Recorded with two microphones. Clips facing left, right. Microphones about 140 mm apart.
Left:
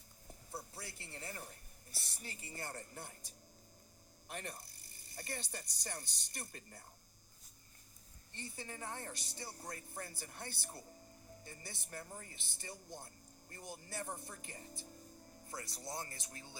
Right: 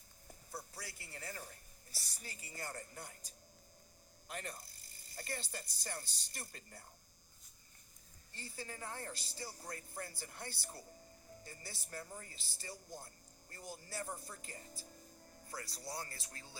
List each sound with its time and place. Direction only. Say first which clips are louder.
0.5 s a sound: left 1 dB; 25° left (ahead or behind)
2.0 s speech: left 2 dB; 25° left (ahead or behind)
4.3 s speech: even; 25° left (ahead or behind)
8.3 s speech: even; 20° left (ahead or behind)